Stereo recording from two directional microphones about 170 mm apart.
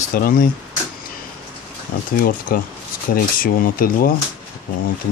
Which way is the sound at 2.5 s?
60° left (ahead or behind).